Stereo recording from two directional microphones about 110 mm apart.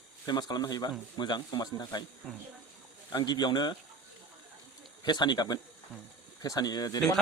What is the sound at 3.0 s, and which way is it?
Speech, 40° left (ahead or behind).